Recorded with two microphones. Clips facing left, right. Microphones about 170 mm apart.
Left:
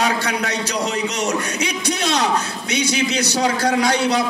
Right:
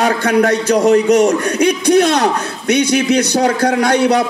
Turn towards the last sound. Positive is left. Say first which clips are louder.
# right 5 dB
turn(degrees=-60)  # may be behind; listen again after turning